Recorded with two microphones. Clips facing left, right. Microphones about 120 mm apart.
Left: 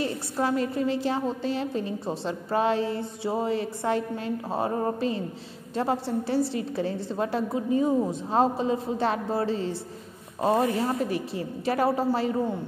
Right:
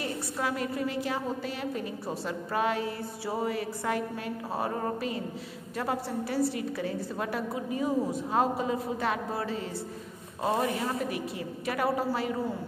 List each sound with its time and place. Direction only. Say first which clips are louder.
0.0 s a woman's voice: left 5 dB; 30° left (ahead or behind)